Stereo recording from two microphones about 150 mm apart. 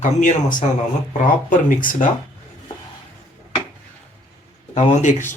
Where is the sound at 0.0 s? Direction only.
60° left (ahead or behind).